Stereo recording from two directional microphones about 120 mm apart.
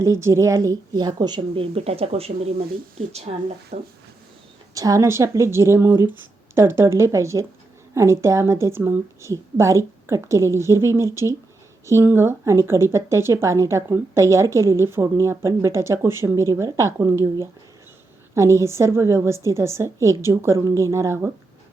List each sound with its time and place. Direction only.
0.0 s speech: 25° right (ahead or behind)
1.4 s speech: 50° right (ahead or behind)
4.7 s speech: 30° right (ahead or behind)
18.3 s speech: 25° right (ahead or behind)